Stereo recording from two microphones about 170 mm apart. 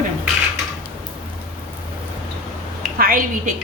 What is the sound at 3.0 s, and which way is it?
Speech, 55° right (ahead or behind).